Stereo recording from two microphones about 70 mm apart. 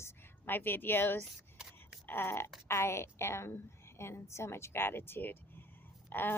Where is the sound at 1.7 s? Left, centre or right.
Left.